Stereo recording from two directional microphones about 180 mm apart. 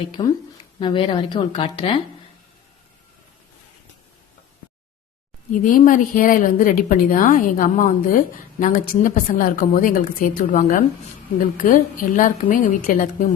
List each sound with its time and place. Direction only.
0.2 s a woman's voice: 30° left (ahead or behind)
5.5 s a woman's voice: 50° left (ahead or behind)